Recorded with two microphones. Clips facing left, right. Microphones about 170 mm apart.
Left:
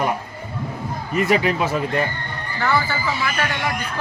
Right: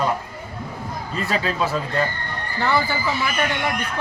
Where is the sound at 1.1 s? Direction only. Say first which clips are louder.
Left 5 dB; 15° left (ahead or behind).